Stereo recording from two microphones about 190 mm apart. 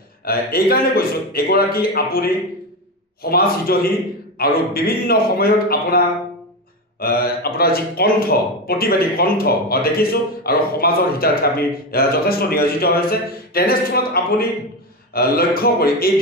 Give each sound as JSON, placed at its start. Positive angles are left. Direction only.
{"t": 0.2, "sound": "speech", "side_deg": 55}